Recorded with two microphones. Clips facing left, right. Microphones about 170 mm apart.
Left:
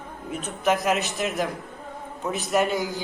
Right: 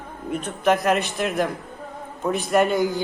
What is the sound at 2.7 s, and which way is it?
Speech, 50° right (ahead or behind).